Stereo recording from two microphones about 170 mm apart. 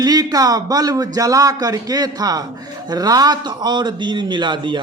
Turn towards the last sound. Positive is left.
turn(degrees=-30)  # may be behind; listen again after turning